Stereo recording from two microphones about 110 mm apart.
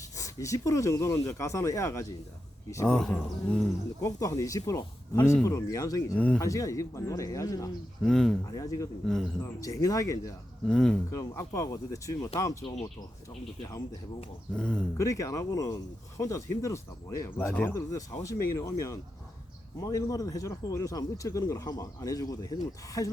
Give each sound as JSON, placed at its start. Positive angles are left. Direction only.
{"t": 0.2, "sound": "speech", "side_deg": 30}
{"t": 2.8, "sound": "speech", "side_deg": 5}
{"t": 4.0, "sound": "speech", "side_deg": 30}
{"t": 6.1, "sound": "speech", "side_deg": 15}
{"t": 6.4, "sound": "speech", "side_deg": 30}
{"t": 8.0, "sound": "speech", "side_deg": 5}
{"t": 8.4, "sound": "speech", "side_deg": 30}
{"t": 10.7, "sound": "speech", "side_deg": 5}
{"t": 11.1, "sound": "speech", "side_deg": 30}
{"t": 14.5, "sound": "speech", "side_deg": 10}
{"t": 14.9, "sound": "speech", "side_deg": 30}
{"t": 17.7, "sound": "speech", "side_deg": 30}